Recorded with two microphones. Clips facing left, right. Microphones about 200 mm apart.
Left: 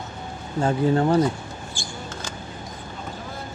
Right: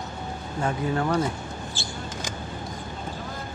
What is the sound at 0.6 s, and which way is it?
Speech, 30° left (ahead or behind).